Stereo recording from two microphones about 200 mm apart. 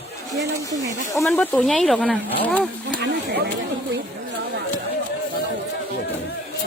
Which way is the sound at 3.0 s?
55° right (ahead or behind).